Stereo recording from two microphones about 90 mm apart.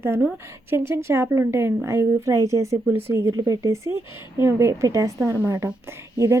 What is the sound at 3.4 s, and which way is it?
Speech, 40° right (ahead or behind).